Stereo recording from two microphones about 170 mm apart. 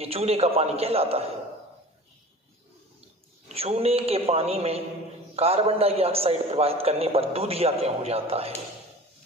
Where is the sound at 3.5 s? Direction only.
35° right (ahead or behind).